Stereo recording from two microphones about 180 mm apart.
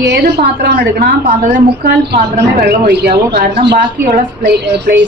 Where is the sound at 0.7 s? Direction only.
65° right (ahead or behind).